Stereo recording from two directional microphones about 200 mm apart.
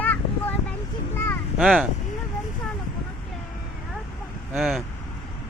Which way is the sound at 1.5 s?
Centre (ahead or behind).